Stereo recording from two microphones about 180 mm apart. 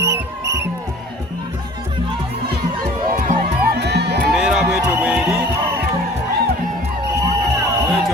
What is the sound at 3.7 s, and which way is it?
Music, 70° right (ahead or behind).